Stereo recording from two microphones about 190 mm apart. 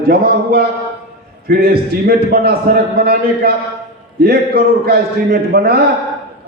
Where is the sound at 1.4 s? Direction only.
55° right (ahead or behind).